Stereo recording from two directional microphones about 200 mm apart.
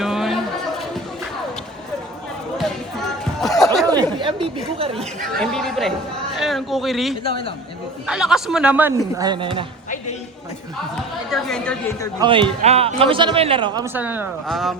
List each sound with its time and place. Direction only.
0.0 s chatter: centre (ahead or behind)
3.4 s snicker: centre (ahead or behind)
3.8 s chatter: 20° right (ahead or behind)
5.4 s a man's voice: 5° left (ahead or behind)
7.3 s speech: 25° left (ahead or behind)
8.0 s a man's voice: 5° right (ahead or behind)
9.1 s a man's voice: 20° right (ahead or behind)
11.3 s a man's voice: 5° left (ahead or behind)
12.2 s a man's voice: 25° right (ahead or behind)
13.8 s a man's voice: 10° right (ahead or behind)